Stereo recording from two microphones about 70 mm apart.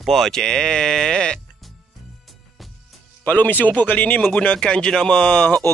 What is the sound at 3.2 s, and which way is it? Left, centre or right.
Speech, left.